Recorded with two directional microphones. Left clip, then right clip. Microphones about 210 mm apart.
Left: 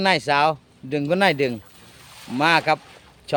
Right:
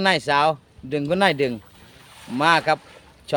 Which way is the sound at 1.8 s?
50° left (ahead or behind).